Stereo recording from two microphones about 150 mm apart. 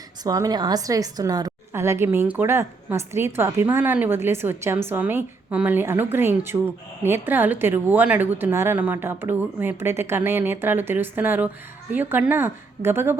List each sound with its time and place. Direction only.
0.3 s a woman's voice: 25° right (ahead or behind)